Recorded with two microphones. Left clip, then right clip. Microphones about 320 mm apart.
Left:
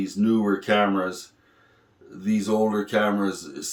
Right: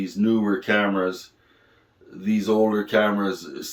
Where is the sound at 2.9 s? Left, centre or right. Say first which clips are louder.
Right 2 dB; centre.